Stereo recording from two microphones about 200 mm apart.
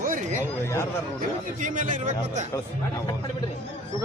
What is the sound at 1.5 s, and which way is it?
Speech, 40° right (ahead or behind).